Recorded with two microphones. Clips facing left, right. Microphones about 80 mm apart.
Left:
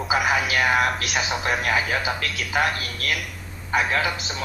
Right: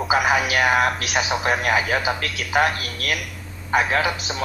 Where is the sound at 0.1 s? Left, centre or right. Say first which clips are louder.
Right 2 dB; centre.